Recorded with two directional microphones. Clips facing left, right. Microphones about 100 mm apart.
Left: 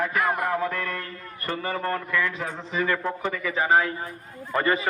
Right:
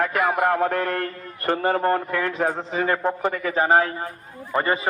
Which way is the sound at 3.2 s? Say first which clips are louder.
Right 4 dB; 55° right (ahead or behind).